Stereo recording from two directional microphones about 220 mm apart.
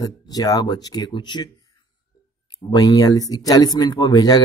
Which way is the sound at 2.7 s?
15° left (ahead or behind).